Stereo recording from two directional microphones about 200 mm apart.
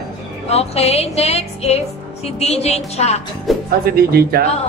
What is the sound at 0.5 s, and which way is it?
A woman's voice, 30° left (ahead or behind).